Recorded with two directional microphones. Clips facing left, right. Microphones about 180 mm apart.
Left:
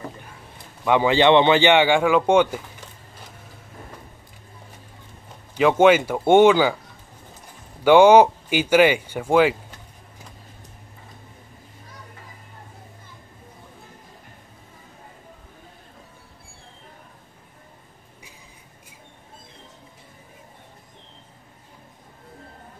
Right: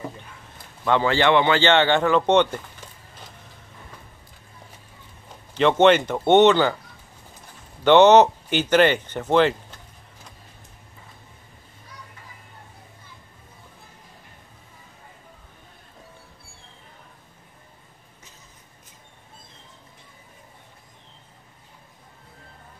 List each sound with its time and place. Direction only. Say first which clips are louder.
0.8 s speech: left 3 dB; 15° left (ahead or behind)
5.5 s speech: left 1 dB; 5° left (ahead or behind)
7.8 s speech: left 1 dB; 10° left (ahead or behind)